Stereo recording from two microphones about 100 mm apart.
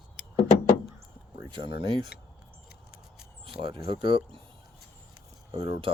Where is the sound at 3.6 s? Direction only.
55° right (ahead or behind).